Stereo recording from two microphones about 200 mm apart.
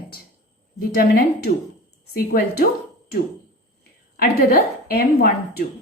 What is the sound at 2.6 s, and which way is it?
Speech, 40° left (ahead or behind).